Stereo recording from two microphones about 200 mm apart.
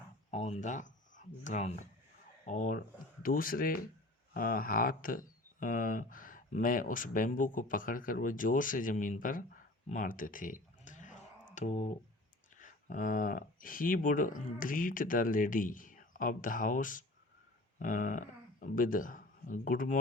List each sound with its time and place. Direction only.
0.3 s speech: 35° left (ahead or behind)
9.9 s a sound: 40° left (ahead or behind)
12.5 s speech: 40° left (ahead or behind)